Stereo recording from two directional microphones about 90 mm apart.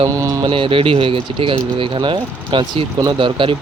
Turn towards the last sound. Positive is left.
turn(degrees=-65)  # may be behind; listen again after turning